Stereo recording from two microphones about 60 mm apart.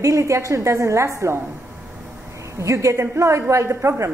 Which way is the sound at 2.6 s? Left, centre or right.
Right.